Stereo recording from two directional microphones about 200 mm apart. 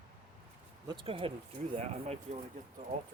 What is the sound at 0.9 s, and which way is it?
Speech, 25° right (ahead or behind).